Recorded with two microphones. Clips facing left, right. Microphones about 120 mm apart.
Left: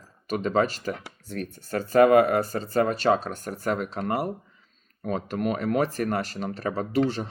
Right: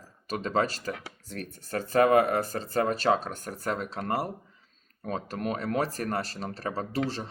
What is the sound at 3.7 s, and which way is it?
Speech, 45° left (ahead or behind).